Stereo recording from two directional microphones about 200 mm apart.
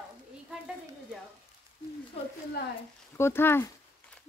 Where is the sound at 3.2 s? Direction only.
10° left (ahead or behind).